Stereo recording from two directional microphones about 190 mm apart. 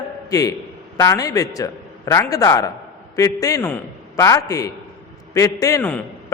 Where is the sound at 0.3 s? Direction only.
20° left (ahead or behind).